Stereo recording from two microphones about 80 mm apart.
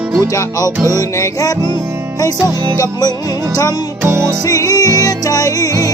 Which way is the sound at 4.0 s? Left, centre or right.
Right.